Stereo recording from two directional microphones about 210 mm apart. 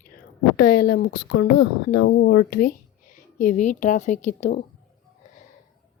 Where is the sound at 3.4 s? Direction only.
35° left (ahead or behind).